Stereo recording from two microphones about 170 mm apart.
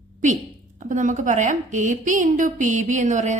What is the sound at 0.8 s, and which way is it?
A woman's voice, 50° right (ahead or behind).